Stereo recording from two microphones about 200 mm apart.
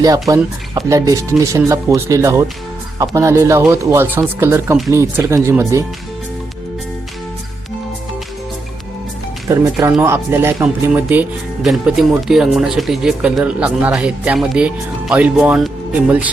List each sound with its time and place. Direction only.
0.0 s speech: 20° right (ahead or behind)
9.5 s speech: 15° right (ahead or behind)